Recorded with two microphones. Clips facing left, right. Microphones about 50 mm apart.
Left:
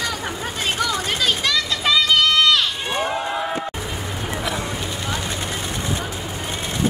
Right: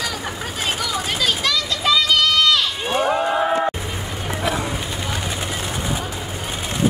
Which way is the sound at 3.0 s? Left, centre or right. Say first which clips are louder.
Right 5 dB; centre.